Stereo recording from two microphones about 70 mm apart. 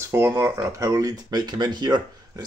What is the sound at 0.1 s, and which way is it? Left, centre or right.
Speech, right.